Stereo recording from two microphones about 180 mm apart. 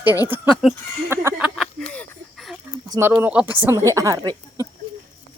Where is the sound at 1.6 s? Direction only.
5° left (ahead or behind).